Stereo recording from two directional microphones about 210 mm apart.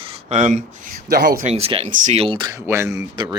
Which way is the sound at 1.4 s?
30° right (ahead or behind).